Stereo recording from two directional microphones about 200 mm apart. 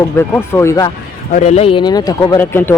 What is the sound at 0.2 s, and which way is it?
Speech, 10° left (ahead or behind).